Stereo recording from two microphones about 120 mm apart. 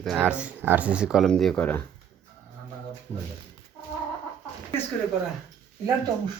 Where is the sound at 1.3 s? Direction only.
5° left (ahead or behind).